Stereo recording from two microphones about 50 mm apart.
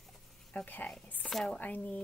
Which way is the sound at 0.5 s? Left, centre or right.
Left.